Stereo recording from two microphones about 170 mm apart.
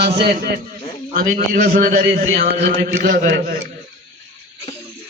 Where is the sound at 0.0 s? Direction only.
75° right (ahead or behind).